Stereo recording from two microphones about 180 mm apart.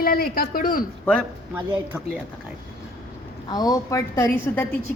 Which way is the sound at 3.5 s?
20° left (ahead or behind).